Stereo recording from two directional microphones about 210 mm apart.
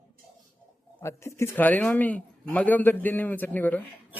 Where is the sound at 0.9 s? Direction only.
15° left (ahead or behind).